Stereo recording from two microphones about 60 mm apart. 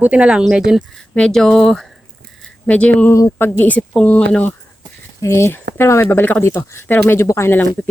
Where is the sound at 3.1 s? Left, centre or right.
Left.